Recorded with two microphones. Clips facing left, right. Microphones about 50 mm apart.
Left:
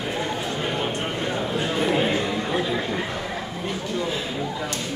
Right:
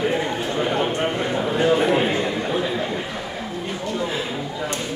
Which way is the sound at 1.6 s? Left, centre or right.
Centre.